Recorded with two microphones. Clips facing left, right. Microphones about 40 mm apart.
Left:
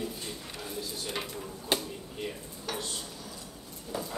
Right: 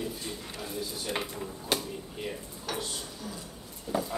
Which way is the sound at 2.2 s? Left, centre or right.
Centre.